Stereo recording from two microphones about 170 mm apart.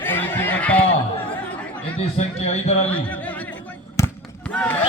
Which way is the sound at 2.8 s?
10° left (ahead or behind).